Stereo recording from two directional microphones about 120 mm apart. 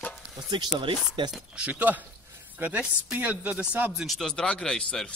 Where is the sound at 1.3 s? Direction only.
10° right (ahead or behind).